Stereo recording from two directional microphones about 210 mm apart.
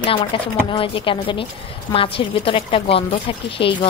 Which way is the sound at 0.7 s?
25° left (ahead or behind).